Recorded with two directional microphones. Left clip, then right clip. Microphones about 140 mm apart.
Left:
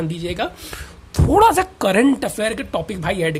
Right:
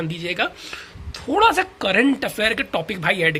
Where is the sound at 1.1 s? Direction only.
55° left (ahead or behind).